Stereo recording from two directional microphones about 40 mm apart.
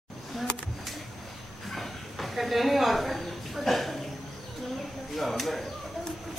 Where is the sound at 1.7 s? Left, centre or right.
Centre.